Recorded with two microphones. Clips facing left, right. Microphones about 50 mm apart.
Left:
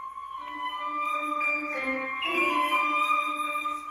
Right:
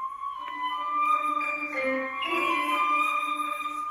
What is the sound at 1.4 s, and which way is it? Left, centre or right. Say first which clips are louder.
Music: left 2 dB; left.